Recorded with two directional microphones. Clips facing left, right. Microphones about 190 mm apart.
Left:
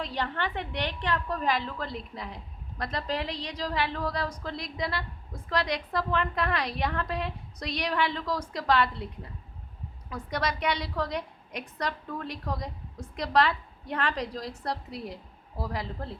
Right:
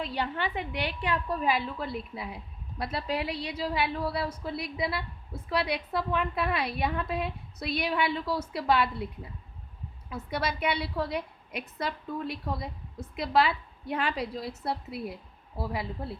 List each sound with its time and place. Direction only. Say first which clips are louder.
0.0 s a woman's voice: even; 10° right (ahead or behind)